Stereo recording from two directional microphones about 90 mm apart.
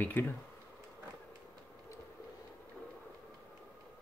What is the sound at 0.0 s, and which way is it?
Speech, 20° left (ahead or behind).